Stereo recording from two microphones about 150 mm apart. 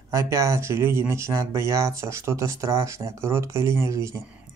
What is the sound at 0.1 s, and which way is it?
Speech, 20° right (ahead or behind).